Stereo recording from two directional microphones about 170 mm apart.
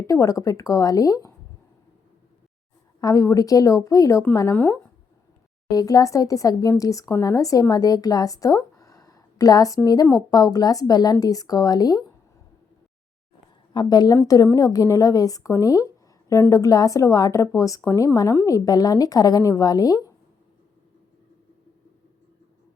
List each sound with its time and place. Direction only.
0.1 s speech: 20° left (ahead or behind)
3.0 s speech: 20° left (ahead or behind)
5.6 s speech: 20° left (ahead or behind)
13.7 s speech: 25° left (ahead or behind)